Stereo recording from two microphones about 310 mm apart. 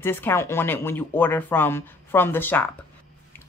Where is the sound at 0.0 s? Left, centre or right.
Centre.